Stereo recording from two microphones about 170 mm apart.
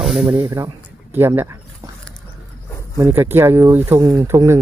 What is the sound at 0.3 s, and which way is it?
Speech, 15° right (ahead or behind).